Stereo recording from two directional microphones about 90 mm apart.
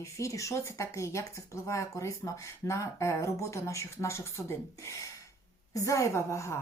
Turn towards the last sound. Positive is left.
turn(degrees=35)  # may be behind; listen again after turning